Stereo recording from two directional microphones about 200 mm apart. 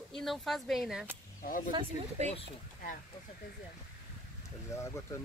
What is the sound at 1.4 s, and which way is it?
Speech, 40° left (ahead or behind).